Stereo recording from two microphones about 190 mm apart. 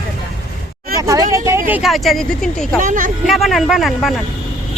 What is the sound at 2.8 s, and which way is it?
Speech, 45° right (ahead or behind).